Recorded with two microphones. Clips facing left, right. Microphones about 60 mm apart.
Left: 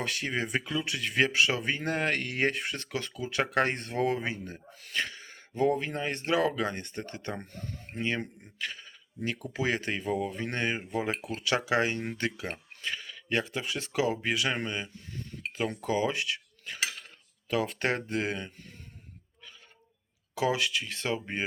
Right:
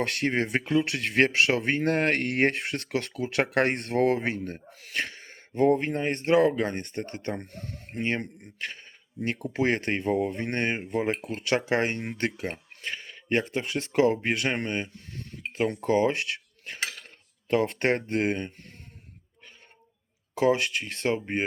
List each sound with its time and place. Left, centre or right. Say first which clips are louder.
0.0 s speech: right 5 dB; right
8.5 s speech: even; right
15.8 s cutlery: right 5 dB; right
17.5 s speech: right 5 dB; right
20.3 s speech: right 5 dB; right